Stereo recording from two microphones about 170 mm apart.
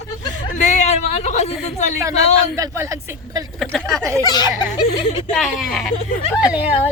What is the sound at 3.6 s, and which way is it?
Speech, centre (ahead or behind).